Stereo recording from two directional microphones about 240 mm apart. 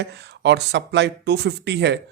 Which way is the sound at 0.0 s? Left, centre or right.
Right.